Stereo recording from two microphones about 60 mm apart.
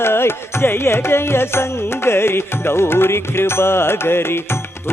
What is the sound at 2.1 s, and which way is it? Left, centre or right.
Music, left.